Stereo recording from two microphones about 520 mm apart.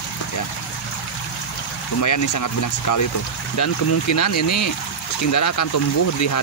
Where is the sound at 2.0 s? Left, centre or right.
Left.